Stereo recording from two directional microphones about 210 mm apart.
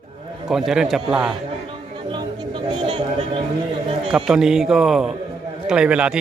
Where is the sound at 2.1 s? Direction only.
20° right (ahead or behind).